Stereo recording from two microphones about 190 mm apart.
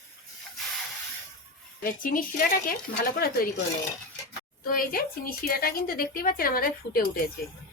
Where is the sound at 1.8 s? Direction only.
45° left (ahead or behind).